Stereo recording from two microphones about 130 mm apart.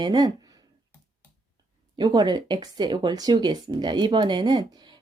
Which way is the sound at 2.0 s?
35° right (ahead or behind).